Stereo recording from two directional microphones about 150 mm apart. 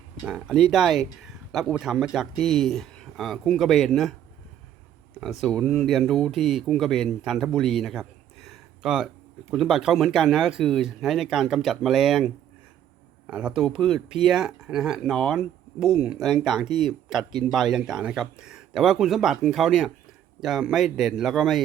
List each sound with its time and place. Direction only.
0.3 s speech: centre (ahead or behind)
5.2 s speech: centre (ahead or behind)